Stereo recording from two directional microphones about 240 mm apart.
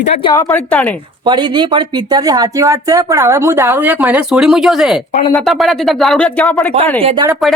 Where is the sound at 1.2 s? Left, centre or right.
Centre.